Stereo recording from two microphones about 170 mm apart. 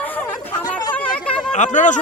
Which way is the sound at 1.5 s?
45° left (ahead or behind).